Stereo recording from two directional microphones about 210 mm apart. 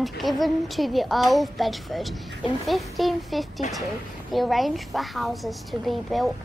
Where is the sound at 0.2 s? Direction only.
Centre (ahead or behind).